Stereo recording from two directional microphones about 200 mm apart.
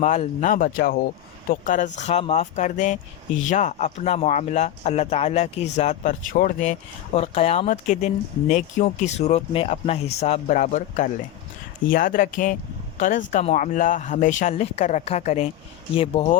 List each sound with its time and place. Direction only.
0.0 s speech: 35° left (ahead or behind)